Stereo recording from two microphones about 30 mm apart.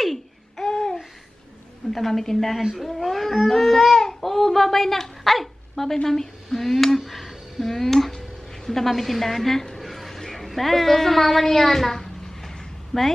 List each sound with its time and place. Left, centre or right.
0.6 s babbling: left
1.9 s speech: centre
5.2 s dog: centre
6.0 s speech: centre
8.1 s music: centre
8.9 s a woman's voice: centre
9.8 s a sound: centre